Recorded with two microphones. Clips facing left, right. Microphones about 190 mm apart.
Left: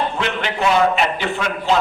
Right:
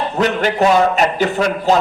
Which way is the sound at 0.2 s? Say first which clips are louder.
Right 6 dB; 40° right (ahead or behind).